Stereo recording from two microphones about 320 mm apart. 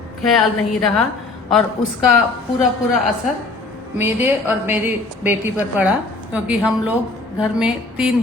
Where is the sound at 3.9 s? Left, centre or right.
Centre.